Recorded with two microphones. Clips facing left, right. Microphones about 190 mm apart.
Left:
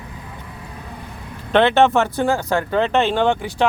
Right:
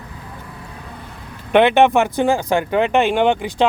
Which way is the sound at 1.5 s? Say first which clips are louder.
Right 2 dB; 15° right (ahead or behind).